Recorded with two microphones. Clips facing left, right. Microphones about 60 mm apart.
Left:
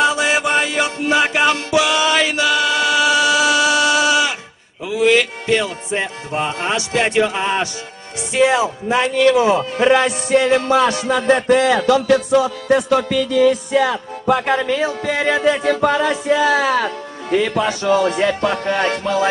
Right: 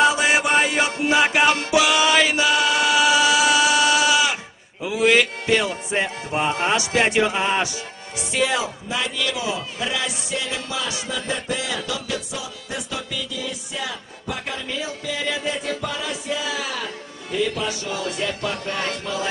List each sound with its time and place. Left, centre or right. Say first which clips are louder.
0.1 s music: left 2 dB; centre
2.2 s chant: left 2 dB; centre
3.8 s sheep: left 3 dB; left
5.1 s speech: left 2 dB; centre
5.9 s music: left 2 dB; centre
6.9 s speech: left 2 dB; centre
7.2 s music: left 3 dB; centre
8.4 s speech: left 7 dB; left
8.8 s speech: left 11 dB; left